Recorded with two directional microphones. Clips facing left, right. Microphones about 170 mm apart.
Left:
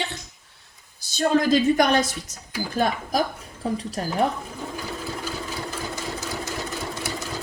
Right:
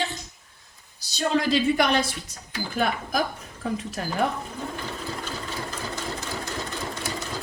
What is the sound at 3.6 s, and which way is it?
Speech, 35° left (ahead or behind).